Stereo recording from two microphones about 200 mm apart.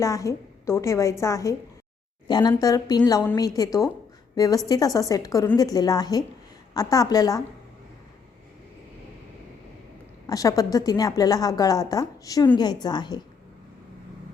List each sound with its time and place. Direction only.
0.0 s a woman's voice: 15° left (ahead or behind)
10.2 s a woman's voice: 15° left (ahead or behind)